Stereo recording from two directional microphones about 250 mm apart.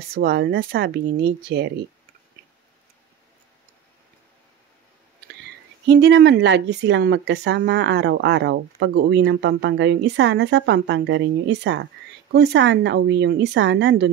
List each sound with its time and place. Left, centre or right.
0.1 s speech: right
5.9 s speech: right